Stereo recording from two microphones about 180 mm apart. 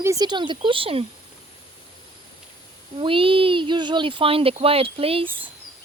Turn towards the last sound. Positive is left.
turn(degrees=-30)  # may be behind; listen again after turning